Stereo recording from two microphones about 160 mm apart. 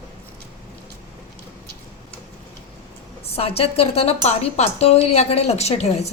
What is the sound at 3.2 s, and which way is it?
A woman's voice, 40° left (ahead or behind).